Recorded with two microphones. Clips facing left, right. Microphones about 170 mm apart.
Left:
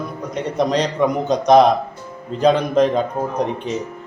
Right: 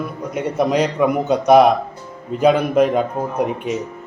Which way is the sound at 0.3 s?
10° right (ahead or behind).